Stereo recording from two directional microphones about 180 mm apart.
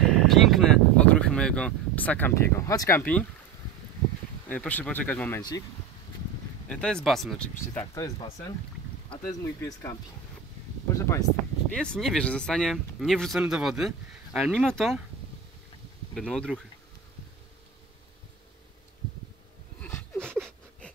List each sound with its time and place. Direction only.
0.0 s speech: centre (ahead or behind)
4.5 s speech: 10° left (ahead or behind)
6.7 s speech: 5° left (ahead or behind)
7.9 s speech: 20° left (ahead or behind)
11.7 s speech: 5° left (ahead or behind)
16.2 s speech: 5° left (ahead or behind)
20.2 s a sound: 10° right (ahead or behind)